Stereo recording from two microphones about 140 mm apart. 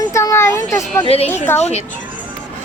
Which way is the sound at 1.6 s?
50° left (ahead or behind).